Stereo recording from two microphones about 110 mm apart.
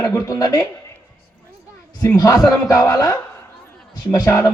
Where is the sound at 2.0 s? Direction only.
30° left (ahead or behind).